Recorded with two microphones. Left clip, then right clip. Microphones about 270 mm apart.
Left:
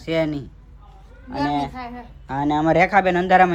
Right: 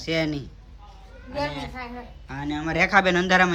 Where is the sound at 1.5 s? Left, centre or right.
Centre.